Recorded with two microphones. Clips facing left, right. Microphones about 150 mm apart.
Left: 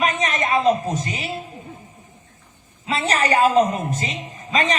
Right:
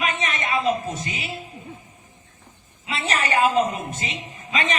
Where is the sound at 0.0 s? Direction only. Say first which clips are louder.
Left 4 dB; 40° left (ahead or behind).